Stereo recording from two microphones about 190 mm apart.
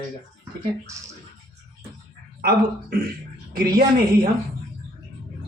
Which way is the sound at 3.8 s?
50° right (ahead or behind).